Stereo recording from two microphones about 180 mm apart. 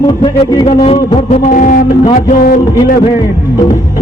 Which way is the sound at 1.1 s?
45° left (ahead or behind).